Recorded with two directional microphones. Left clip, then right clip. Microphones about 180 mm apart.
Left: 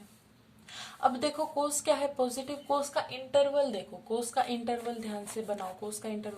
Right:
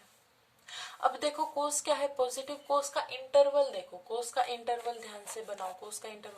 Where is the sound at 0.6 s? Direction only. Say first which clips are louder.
Left 2 dB; 25° right (ahead or behind).